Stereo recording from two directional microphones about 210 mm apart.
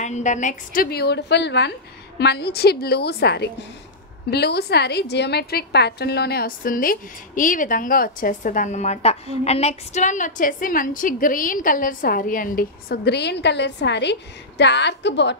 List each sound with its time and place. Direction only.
0.0 s a woman's voice: 35° left (ahead or behind); by 15.3 s 55° left (ahead or behind)